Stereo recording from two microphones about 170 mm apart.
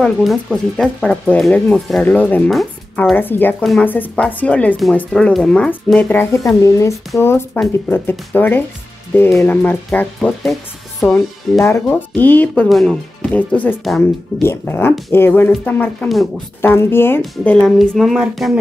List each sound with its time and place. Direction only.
0.0 s speech: centre (ahead or behind)
11.6 s speech: 15° left (ahead or behind); by 18.6 s centre (ahead or behind)